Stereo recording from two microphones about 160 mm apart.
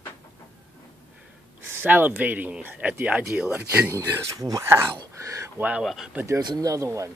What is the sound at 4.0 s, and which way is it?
Speech, 20° right (ahead or behind).